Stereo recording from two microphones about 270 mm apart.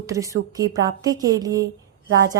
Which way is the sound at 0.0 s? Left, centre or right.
Centre.